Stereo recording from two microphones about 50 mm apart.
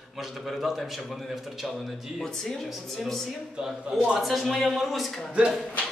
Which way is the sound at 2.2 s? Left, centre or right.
Centre.